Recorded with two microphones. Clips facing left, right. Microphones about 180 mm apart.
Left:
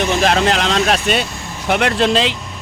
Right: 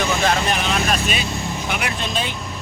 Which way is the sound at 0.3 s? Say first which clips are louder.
Left 6 dB; 85° left.